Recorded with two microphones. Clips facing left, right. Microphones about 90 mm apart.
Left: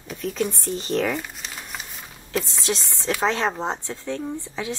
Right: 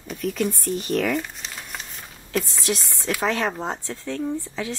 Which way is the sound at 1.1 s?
Centre (ahead or behind).